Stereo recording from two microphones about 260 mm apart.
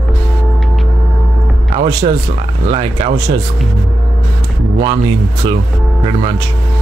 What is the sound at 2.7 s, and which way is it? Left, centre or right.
Speech, right.